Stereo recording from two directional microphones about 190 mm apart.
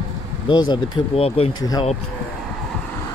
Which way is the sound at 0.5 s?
25° left (ahead or behind).